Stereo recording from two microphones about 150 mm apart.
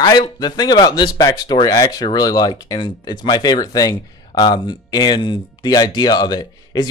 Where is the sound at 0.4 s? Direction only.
30° left (ahead or behind).